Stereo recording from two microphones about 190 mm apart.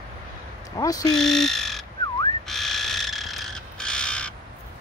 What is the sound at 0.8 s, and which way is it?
Speech, 20° left (ahead or behind).